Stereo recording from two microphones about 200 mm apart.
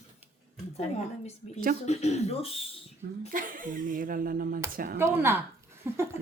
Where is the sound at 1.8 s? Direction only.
35° left (ahead or behind).